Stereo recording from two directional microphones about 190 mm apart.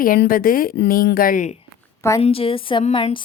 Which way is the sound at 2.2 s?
30° left (ahead or behind).